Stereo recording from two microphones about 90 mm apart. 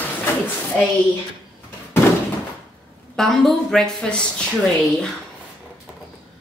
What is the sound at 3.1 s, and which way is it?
A woman's voice, 5° left (ahead or behind).